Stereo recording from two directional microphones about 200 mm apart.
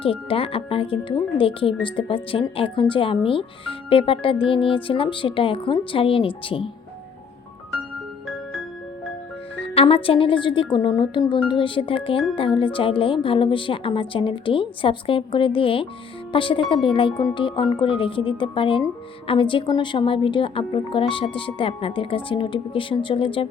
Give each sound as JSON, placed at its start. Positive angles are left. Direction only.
{"t": 0.0, "sound": "speech", "side_deg": 25}
{"t": 9.6, "sound": "speech", "side_deg": 30}